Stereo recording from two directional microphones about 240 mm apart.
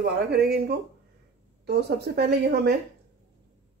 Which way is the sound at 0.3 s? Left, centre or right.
Right.